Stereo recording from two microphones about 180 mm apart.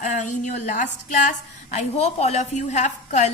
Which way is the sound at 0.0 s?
45° left (ahead or behind).